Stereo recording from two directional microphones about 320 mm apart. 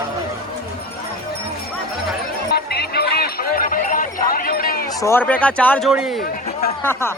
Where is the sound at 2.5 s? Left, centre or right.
Left.